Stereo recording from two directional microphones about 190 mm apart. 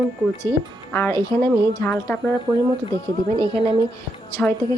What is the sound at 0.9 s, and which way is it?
Speech, 10° left (ahead or behind).